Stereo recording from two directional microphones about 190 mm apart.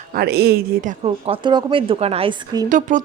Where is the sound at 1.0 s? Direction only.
30° right (ahead or behind).